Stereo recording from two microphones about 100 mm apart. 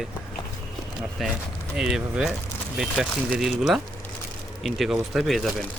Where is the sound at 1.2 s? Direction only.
Centre (ahead or behind).